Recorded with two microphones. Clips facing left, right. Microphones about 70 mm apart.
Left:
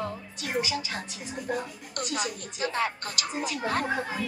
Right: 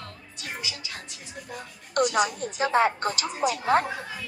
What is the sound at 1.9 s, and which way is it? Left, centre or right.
Speech, right.